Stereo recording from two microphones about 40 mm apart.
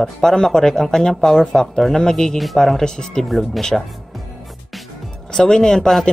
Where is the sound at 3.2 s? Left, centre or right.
Centre.